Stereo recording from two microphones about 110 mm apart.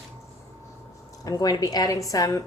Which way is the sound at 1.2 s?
35° left (ahead or behind).